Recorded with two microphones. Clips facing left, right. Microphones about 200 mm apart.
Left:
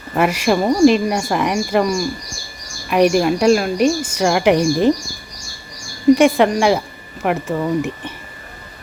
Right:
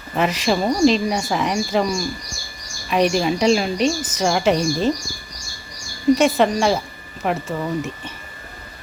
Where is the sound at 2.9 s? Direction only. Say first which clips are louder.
Left 4 dB; 10° left (ahead or behind).